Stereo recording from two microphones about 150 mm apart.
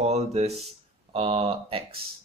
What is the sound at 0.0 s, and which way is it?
Speech, 45° right (ahead or behind).